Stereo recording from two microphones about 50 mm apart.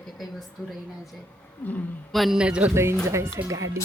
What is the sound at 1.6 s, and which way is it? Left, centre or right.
Speech, left.